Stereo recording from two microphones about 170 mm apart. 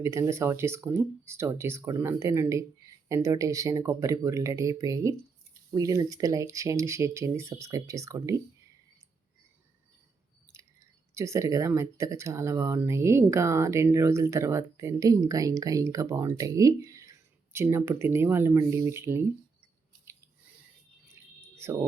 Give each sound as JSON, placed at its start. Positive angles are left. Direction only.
{"t": 0.0, "sound": "speech", "side_deg": -15}
{"t": 10.5, "sound": "chewing", "side_deg": -15}
{"t": 11.1, "sound": "speech", "side_deg": -15}
{"t": 21.5, "sound": "a sound", "side_deg": -15}